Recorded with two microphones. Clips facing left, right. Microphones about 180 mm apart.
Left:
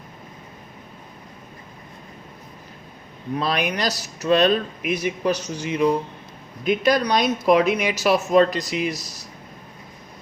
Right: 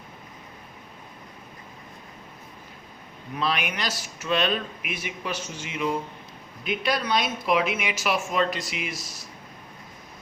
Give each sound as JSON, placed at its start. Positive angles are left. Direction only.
{"t": 3.3, "sound": "speech", "side_deg": 40}